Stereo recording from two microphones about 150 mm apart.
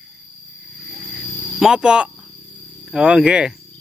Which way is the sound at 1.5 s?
5° right (ahead or behind).